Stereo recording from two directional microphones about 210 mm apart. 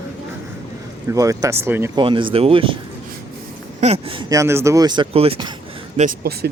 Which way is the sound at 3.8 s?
25° right (ahead or behind).